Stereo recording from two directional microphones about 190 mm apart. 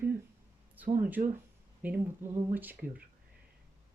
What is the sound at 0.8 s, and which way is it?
Speech, 10° right (ahead or behind).